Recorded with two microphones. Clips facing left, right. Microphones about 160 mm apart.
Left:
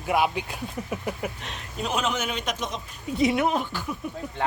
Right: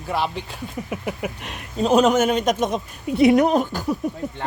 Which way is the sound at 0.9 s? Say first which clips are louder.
Right 4 dB; 10° right (ahead or behind).